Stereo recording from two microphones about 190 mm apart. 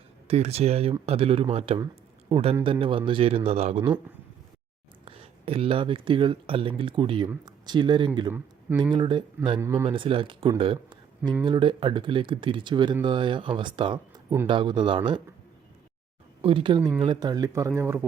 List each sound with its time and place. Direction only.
0.3 s a man's voice: 35° right (ahead or behind)
5.0 s speech: 30° right (ahead or behind)
9.6 s a man's voice: 15° right (ahead or behind)
9.8 s speech: 25° right (ahead or behind)
16.4 s a man's voice: 30° right (ahead or behind)